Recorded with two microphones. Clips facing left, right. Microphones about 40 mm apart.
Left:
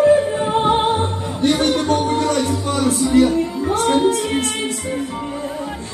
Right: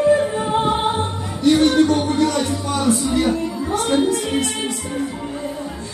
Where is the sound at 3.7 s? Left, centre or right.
Left.